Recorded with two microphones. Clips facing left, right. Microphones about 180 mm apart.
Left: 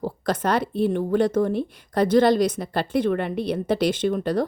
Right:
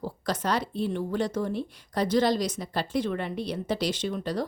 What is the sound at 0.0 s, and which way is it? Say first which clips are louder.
Speech: left 5 dB; 55° left (ahead or behind).